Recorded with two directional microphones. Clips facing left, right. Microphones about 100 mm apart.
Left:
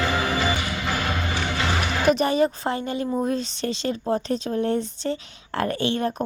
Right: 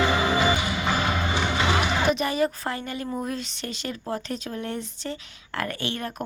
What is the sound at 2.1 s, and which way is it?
A woman's voice, 30° left (ahead or behind).